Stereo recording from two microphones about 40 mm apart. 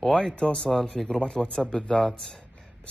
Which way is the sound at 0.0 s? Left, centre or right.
Centre.